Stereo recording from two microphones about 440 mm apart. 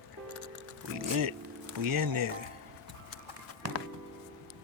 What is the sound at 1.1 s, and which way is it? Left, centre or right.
Speech, right.